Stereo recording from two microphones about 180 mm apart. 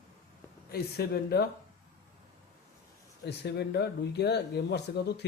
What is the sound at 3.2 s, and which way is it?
Speech, 65° left (ahead or behind).